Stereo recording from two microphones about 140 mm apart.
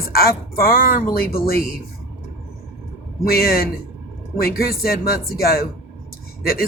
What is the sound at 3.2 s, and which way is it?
Speech, 90° left.